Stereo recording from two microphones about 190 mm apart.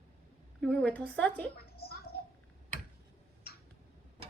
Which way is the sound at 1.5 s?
55° left (ahead or behind).